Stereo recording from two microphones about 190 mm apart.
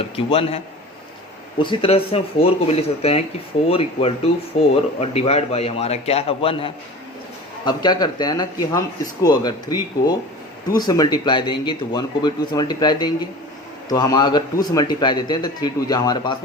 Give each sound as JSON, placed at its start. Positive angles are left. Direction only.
{"t": 0.0, "sound": "a man's voice", "side_deg": 30}
{"t": 1.6, "sound": "a man's voice", "side_deg": 25}